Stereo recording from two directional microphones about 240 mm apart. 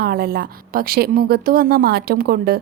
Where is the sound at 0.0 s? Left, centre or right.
Right.